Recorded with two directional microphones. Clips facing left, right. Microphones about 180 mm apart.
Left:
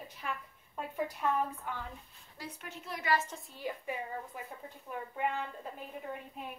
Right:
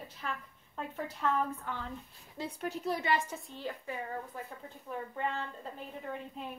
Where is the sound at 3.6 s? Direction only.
15° left (ahead or behind).